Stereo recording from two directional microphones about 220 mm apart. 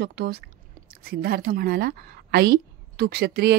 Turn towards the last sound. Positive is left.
turn(degrees=-45)  # may be behind; listen again after turning